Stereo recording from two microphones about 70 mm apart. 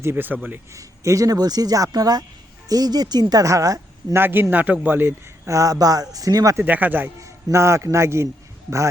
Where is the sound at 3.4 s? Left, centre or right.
Right.